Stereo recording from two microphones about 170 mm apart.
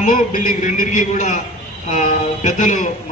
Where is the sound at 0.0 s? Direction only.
50° left (ahead or behind).